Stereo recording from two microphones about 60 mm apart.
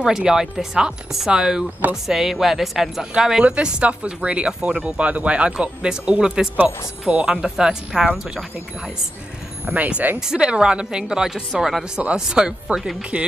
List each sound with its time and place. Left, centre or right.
0.0 s speech: centre
9.8 s speech: right
10.2 s speech: centre